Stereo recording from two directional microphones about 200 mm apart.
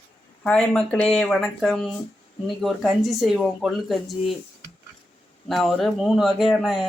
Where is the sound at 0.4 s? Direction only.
5° left (ahead or behind).